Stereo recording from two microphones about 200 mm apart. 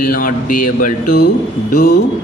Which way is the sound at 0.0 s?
45° left (ahead or behind).